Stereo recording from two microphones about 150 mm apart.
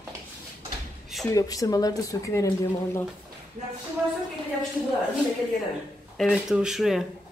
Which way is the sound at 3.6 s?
45° right (ahead or behind).